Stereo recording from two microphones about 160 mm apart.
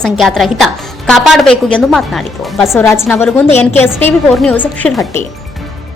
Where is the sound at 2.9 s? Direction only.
15° left (ahead or behind).